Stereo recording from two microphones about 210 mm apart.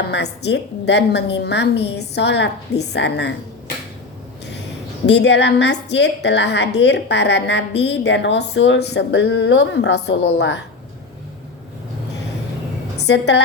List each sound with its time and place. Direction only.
0.1 s a woman's voice: 55° left (ahead or behind)
5.0 s a woman's voice: 55° left (ahead or behind)
13.0 s a woman's voice: 55° left (ahead or behind)